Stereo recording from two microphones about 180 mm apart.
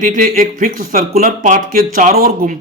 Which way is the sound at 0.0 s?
50° right (ahead or behind).